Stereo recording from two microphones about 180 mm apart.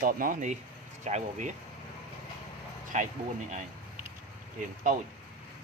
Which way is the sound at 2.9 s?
40° right (ahead or behind).